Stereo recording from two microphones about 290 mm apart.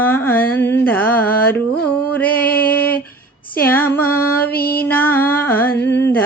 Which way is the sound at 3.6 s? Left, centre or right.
Centre.